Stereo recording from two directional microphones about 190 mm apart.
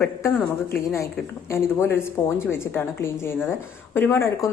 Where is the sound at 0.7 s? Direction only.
15° left (ahead or behind).